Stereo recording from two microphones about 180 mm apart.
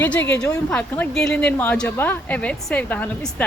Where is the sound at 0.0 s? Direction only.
10° left (ahead or behind).